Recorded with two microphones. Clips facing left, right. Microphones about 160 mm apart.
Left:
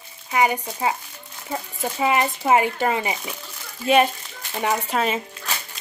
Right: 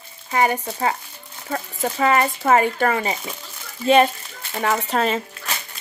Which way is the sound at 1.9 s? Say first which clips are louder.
Right 2 dB; 15° left (ahead or behind).